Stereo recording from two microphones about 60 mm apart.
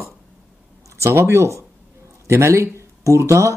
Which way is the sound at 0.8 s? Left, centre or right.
Right.